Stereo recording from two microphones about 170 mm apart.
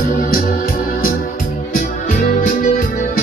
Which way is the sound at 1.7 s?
50° left (ahead or behind).